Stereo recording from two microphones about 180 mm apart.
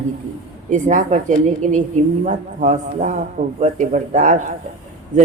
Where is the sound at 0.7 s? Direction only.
45° right (ahead or behind).